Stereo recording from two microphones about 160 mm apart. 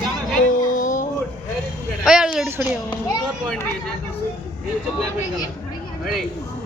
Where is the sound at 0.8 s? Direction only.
50° left (ahead or behind).